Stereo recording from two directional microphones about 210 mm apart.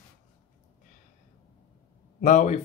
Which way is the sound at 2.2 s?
35° left (ahead or behind).